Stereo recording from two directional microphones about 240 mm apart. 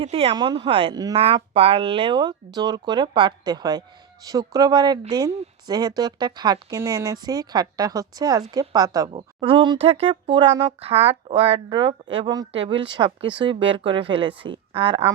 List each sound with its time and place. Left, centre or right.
0.0 s speech: right